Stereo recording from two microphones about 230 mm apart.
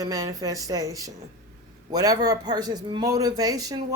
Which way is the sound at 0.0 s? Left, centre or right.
Centre.